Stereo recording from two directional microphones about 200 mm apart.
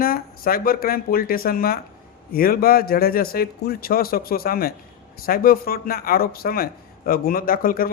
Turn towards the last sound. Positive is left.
turn(degrees=45)  # may be behind; listen again after turning